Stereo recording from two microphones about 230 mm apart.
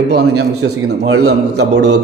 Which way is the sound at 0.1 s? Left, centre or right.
Right.